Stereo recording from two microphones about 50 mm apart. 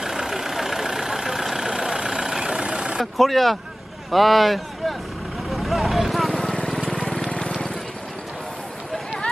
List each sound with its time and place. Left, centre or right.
0.0 s vehicle: centre
3.0 s speech: centre
5.5 s vehicle: centre
7.3 s a sound: left